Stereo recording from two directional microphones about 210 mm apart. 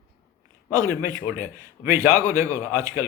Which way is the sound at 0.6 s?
15° right (ahead or behind).